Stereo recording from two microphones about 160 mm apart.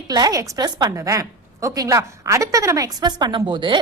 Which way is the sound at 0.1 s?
25° right (ahead or behind).